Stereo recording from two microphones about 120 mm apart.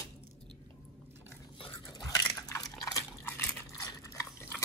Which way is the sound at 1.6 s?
40° left (ahead or behind).